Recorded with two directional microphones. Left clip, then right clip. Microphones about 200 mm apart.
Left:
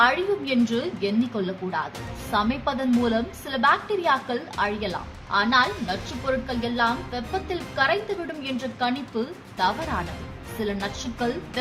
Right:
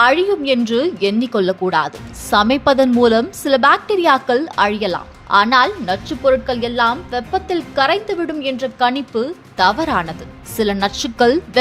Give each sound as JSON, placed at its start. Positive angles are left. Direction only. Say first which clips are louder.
{"t": 0.0, "sound": "a woman's voice", "louder": "right 8 dB", "side_deg": -40}